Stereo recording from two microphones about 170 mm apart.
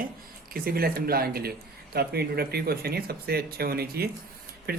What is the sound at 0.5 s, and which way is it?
Speech, 65° right (ahead or behind).